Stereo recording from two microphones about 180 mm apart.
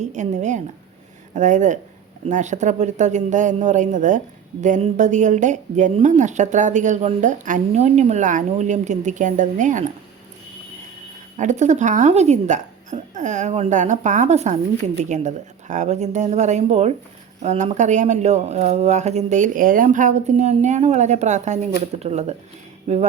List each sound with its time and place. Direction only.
0.0 s a woman's voice: 40° right (ahead or behind)
11.3 s speech: 40° right (ahead or behind)